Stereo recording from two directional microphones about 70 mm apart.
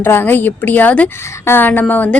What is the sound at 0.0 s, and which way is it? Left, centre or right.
Speech, left.